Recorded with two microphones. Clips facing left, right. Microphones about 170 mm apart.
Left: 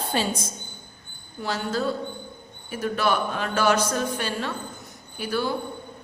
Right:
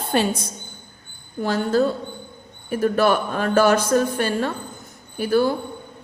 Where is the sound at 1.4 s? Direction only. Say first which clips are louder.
Right 7 dB; 50° right (ahead or behind).